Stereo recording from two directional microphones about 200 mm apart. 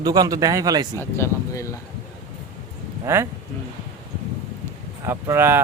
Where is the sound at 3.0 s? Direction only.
10° right (ahead or behind).